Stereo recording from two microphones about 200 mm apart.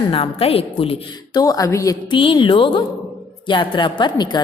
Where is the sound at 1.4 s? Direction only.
15° left (ahead or behind).